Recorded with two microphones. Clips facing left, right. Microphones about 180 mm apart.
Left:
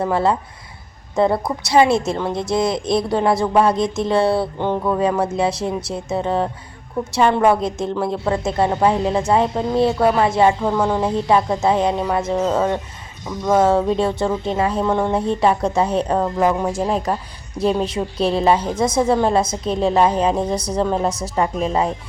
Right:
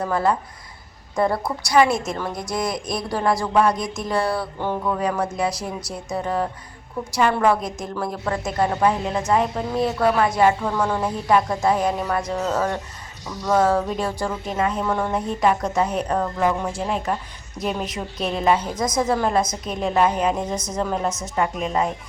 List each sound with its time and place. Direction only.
0.0 s speech: 25° left (ahead or behind)
16.5 s a woman's voice: 40° left (ahead or behind)